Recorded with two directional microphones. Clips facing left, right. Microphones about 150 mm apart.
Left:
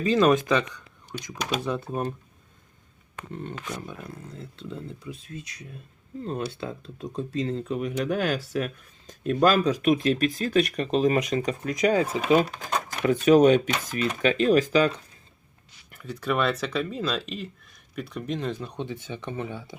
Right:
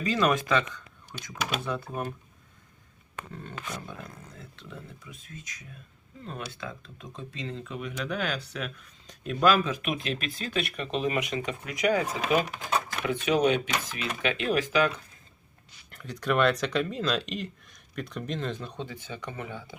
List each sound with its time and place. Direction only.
0.0 s speech: 25° left (ahead or behind)
4.4 s speech: 30° left (ahead or behind)
13.0 s speech: 45° left (ahead or behind)
15.9 s speech: 5° left (ahead or behind)
18.8 s speech: 20° left (ahead or behind)